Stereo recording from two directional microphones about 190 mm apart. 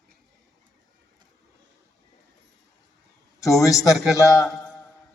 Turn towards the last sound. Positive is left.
turn(degrees=15)  # may be behind; listen again after turning